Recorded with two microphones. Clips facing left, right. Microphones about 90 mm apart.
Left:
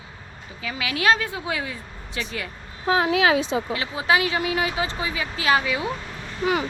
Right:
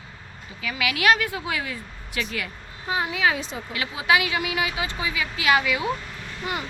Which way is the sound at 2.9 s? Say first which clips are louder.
Left 5 dB; 90° left.